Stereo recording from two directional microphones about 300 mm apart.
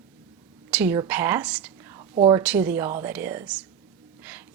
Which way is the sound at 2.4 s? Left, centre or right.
Centre.